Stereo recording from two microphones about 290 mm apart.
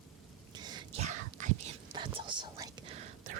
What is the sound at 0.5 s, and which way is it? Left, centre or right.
Whispering, centre.